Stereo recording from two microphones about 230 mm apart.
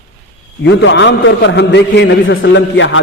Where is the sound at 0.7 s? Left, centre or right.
Left.